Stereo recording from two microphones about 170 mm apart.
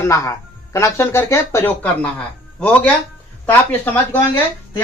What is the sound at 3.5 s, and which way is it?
Speech, 10° left (ahead or behind).